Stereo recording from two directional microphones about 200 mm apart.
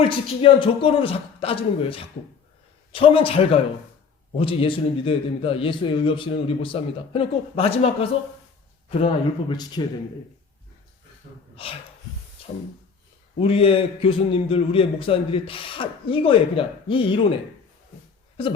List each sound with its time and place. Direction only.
0.0 s a man's voice: 25° left (ahead or behind)
11.5 s speech: 30° left (ahead or behind)
13.4 s a man's voice: 30° left (ahead or behind)